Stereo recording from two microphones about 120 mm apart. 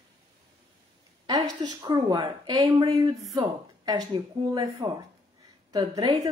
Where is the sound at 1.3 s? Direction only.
30° right (ahead or behind).